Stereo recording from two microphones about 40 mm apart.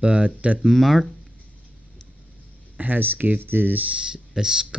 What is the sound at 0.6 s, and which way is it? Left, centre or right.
Speech, centre.